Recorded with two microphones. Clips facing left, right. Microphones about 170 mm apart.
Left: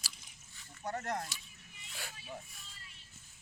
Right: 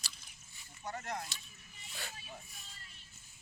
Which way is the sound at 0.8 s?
50° left (ahead or behind).